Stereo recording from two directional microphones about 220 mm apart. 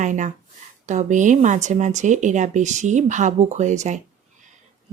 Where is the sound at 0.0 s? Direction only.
35° right (ahead or behind).